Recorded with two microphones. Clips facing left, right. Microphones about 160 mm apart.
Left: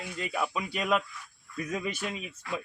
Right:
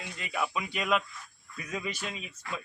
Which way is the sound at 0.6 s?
35° left (ahead or behind).